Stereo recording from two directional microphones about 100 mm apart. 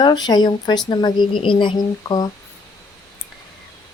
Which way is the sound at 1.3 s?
55° left (ahead or behind).